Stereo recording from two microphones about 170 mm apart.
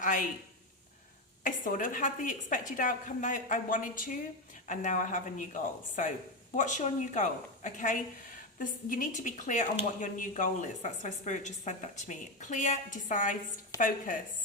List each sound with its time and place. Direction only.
0.0 s speech: 50° left (ahead or behind)
1.5 s speech: 50° left (ahead or behind)